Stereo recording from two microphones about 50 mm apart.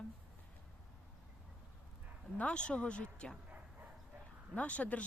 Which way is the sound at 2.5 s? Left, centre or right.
Left.